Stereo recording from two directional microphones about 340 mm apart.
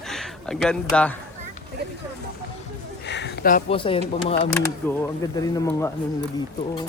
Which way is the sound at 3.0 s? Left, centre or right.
Left.